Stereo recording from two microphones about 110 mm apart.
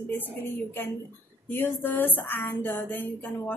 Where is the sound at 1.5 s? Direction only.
15° left (ahead or behind).